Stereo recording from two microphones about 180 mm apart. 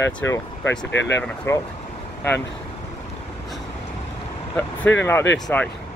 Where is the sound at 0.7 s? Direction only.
90° left.